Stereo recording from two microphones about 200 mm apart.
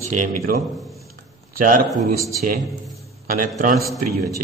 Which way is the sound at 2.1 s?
15° right (ahead or behind).